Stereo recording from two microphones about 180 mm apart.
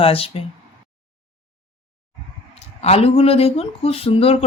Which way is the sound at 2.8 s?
35° left (ahead or behind).